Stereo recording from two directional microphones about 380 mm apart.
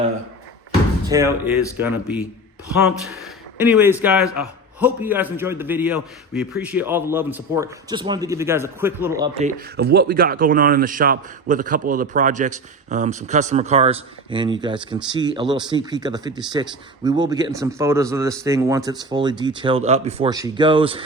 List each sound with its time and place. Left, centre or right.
1.0 s a man's voice: centre
3.6 s a man's voice: centre
9.7 s a man's voice: right